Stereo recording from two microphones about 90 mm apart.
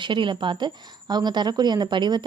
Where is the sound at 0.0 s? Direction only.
65° right (ahead or behind).